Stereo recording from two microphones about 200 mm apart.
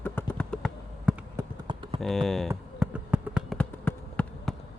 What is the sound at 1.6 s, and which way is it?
Typing, 25° right (ahead or behind).